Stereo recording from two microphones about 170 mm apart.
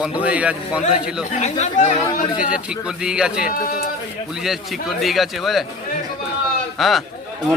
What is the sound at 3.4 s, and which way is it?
Speech, 60° left (ahead or behind).